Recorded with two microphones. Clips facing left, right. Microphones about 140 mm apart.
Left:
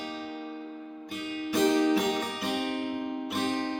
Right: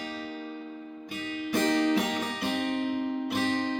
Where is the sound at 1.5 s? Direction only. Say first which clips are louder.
Left 1 dB; centre (ahead or behind).